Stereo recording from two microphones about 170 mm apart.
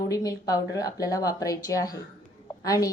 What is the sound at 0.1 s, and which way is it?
A woman's voice, 20° left (ahead or behind).